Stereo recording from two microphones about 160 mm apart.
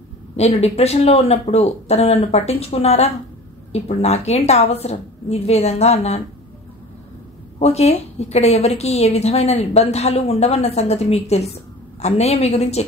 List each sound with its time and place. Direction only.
0.4 s a woman's voice: 40° left (ahead or behind)
7.5 s a woman's voice: 40° left (ahead or behind)